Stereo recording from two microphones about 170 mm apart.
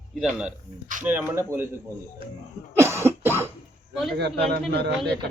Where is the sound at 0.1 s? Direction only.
5° right (ahead or behind).